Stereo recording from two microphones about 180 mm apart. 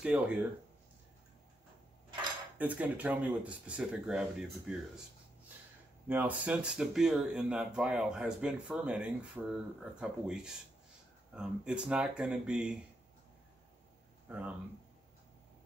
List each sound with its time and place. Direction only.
0.0 s speech: 10° right (ahead or behind)
2.5 s speech: 10° right (ahead or behind)
6.0 s speech: 10° right (ahead or behind)
14.2 s speech: 10° right (ahead or behind)